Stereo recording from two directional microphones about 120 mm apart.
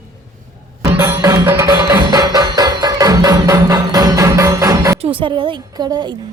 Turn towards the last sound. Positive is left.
turn(degrees=-35)  # may be behind; listen again after turning